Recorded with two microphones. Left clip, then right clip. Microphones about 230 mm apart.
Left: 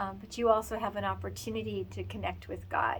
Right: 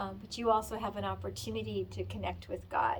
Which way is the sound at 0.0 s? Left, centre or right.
Centre.